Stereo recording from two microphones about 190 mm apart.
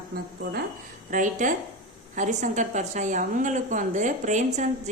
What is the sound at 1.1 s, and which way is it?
A woman's voice, 40° right (ahead or behind).